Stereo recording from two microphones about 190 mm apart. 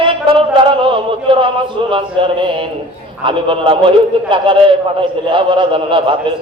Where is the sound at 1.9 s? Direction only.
25° right (ahead or behind).